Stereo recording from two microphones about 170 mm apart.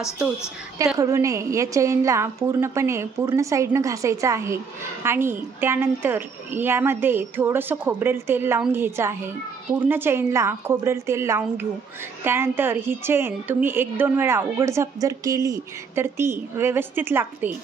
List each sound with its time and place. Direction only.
0.9 s a woman's voice: 20° right (ahead or behind)